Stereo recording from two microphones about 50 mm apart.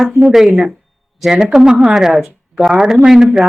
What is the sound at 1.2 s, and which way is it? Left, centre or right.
Speech, centre.